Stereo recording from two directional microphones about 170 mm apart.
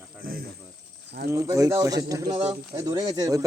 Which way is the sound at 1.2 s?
70° right (ahead or behind).